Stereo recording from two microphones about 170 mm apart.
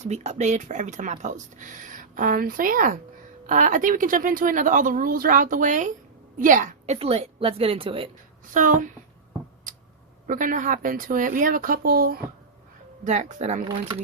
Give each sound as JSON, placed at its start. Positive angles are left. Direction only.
{"t": 0.0, "sound": "a woman's voice", "side_deg": -40}
{"t": 8.5, "sound": "a woman's voice", "side_deg": -50}
{"t": 9.7, "sound": "a sound", "side_deg": -50}
{"t": 10.2, "sound": "a woman's voice", "side_deg": -50}
{"t": 13.1, "sound": "a woman's voice", "side_deg": -45}
{"t": 13.7, "sound": "speech", "side_deg": -25}